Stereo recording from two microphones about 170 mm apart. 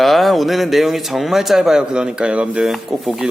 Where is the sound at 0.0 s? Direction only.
Centre (ahead or behind).